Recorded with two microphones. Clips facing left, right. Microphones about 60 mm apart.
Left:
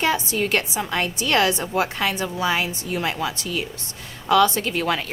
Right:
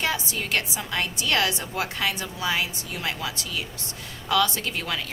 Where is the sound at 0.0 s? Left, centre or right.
Left.